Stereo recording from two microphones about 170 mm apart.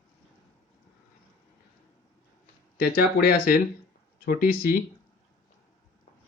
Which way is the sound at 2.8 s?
65° left (ahead or behind).